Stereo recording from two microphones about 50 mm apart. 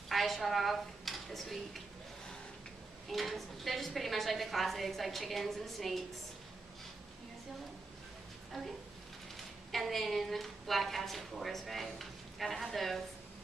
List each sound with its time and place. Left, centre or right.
0.1 s a woman's voice: centre
3.1 s a woman's voice: centre
8.5 s a woman's voice: centre